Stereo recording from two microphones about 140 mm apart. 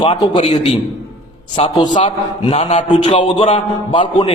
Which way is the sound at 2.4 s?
40° left (ahead or behind).